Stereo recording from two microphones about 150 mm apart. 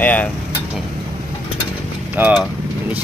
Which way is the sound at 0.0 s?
10° left (ahead or behind).